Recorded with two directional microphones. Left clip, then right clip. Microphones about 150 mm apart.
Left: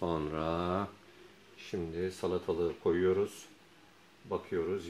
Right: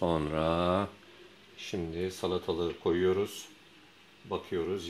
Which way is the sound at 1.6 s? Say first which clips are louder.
Right 2 dB; 30° right (ahead or behind).